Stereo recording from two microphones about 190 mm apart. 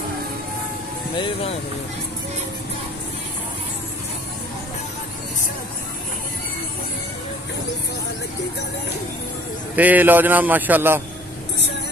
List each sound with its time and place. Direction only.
1.1 s speech: 25° left (ahead or behind)
9.8 s a man's voice: 10° right (ahead or behind)